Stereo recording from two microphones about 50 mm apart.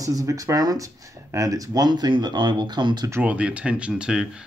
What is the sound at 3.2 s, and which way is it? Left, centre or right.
Speech, right.